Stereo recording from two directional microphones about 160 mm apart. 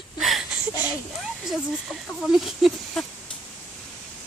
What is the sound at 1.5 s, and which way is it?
Speech, centre (ahead or behind).